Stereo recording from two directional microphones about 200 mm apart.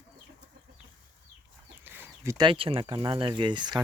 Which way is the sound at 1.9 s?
10° right (ahead or behind).